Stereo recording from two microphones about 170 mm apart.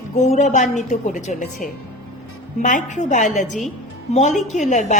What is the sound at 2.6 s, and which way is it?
A woman's voice, 45° left (ahead or behind).